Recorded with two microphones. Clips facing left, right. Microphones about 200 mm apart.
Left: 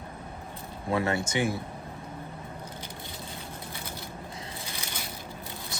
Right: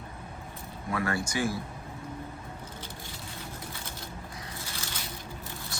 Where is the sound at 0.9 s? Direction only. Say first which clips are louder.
Left 3 dB; 25° left (ahead or behind).